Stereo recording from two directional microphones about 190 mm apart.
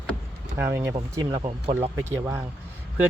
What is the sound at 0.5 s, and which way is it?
Speech, 10° right (ahead or behind).